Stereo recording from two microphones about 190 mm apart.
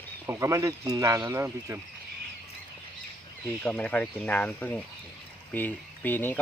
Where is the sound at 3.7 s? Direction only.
5° left (ahead or behind).